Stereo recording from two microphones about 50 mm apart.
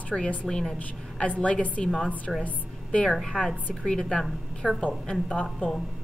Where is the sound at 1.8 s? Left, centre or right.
Centre.